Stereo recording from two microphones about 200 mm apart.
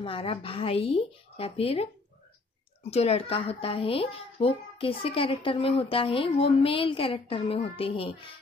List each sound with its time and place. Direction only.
0.0 s speech: 25° left (ahead or behind)